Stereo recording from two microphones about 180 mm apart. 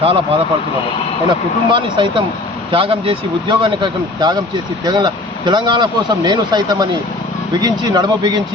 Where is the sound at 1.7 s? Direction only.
25° right (ahead or behind).